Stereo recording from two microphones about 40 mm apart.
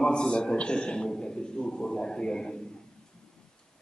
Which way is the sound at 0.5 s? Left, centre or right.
Left.